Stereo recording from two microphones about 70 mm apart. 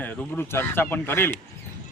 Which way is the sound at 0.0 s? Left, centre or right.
Left.